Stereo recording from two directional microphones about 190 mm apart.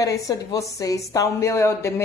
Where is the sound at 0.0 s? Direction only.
15° left (ahead or behind).